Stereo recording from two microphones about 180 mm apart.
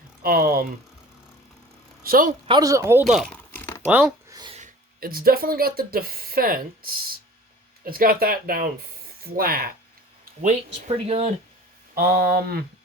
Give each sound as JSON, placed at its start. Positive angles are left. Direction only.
{"t": 0.2, "sound": "speech", "side_deg": -55}
{"t": 2.0, "sound": "speech", "side_deg": -50}
{"t": 2.5, "sound": "speech", "side_deg": -20}
{"t": 3.1, "sound": "crumpling", "side_deg": 5}
{"t": 3.8, "sound": "speech", "side_deg": -10}
{"t": 4.3, "sound": "a sound", "side_deg": -20}
{"t": 4.5, "sound": "speech", "side_deg": -50}
{"t": 10.4, "sound": "speech", "side_deg": -35}
{"t": 11.9, "sound": "speech", "side_deg": -55}